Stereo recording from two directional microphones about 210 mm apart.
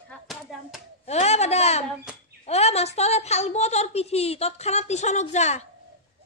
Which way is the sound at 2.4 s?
30° left (ahead or behind).